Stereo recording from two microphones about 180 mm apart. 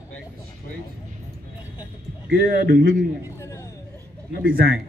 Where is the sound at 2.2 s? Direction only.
60° right (ahead or behind).